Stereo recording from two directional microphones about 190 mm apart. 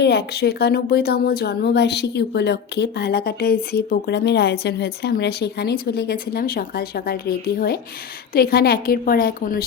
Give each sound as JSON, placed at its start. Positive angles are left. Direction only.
{"t": 0.0, "sound": "a woman's voice", "side_deg": 60}